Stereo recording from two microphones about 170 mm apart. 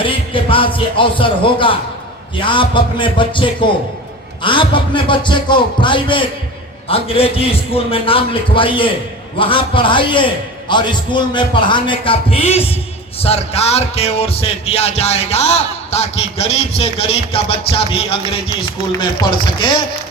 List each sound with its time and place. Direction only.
0.0 s a man's voice: 30° left (ahead or behind)